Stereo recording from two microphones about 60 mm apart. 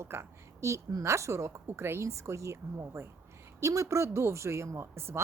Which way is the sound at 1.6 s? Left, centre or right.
Right.